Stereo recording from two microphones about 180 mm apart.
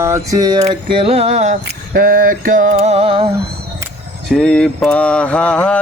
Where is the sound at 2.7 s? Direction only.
35° right (ahead or behind).